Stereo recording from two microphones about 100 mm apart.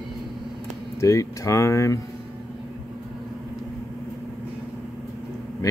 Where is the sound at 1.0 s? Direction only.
30° left (ahead or behind).